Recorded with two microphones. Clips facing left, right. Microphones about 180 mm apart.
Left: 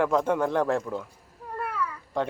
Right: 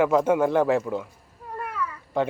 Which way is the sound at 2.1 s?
5° right (ahead or behind).